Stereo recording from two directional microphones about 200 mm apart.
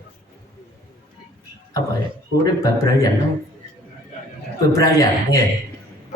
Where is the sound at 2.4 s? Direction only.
15° left (ahead or behind).